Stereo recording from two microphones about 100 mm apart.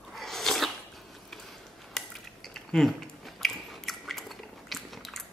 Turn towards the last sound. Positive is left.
turn(degrees=0)  # may be behind; listen again after turning